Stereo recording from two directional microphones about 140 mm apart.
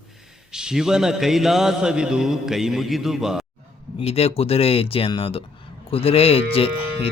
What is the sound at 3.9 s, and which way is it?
Speech, 45° left (ahead or behind).